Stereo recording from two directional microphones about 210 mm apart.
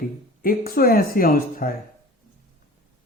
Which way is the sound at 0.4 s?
45° left (ahead or behind).